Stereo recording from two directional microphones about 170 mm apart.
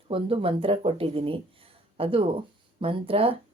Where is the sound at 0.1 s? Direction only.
30° right (ahead or behind).